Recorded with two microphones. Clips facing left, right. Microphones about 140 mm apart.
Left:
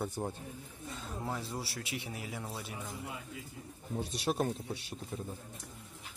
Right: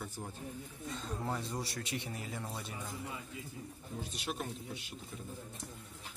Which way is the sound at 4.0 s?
35° left (ahead or behind).